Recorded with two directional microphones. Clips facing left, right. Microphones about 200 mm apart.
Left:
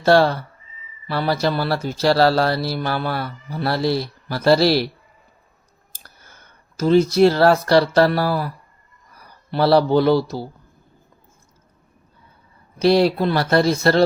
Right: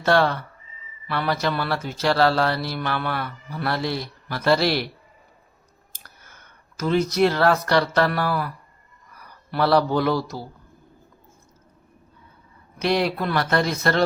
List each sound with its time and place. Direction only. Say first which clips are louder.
0.0 s speech: left 5 dB; 35° left (ahead or behind)
5.9 s a man's voice: left 2 dB; 30° left (ahead or behind)
12.8 s speech: left 7 dB; 30° left (ahead or behind)